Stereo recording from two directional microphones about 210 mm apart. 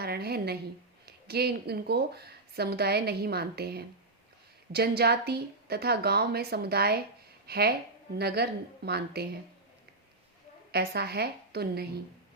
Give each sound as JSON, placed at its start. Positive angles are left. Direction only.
{"t": 0.0, "sound": "a sound", "side_deg": -50}
{"t": 1.0, "sound": "speech", "side_deg": -50}
{"t": 10.7, "sound": "speech", "side_deg": -50}